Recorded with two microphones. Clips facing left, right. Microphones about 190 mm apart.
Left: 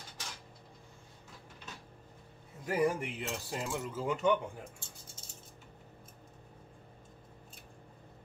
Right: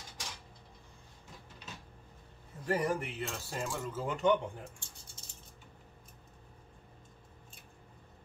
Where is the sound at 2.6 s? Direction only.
10° left (ahead or behind).